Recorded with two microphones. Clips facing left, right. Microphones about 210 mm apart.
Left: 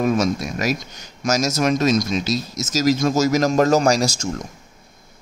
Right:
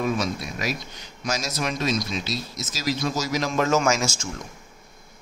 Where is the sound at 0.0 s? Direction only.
45° left (ahead or behind).